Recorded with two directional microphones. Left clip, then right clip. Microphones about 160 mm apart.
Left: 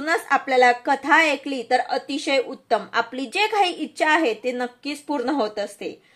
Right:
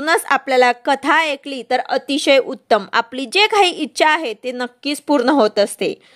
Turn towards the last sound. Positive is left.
turn(degrees=-45)  # may be behind; listen again after turning